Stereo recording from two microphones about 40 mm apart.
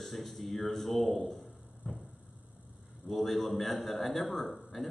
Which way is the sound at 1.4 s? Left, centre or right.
Left.